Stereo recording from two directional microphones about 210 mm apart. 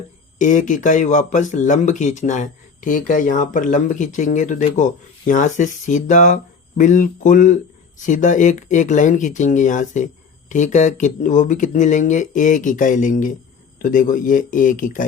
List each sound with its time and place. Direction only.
0.3 s speech: 35° left (ahead or behind)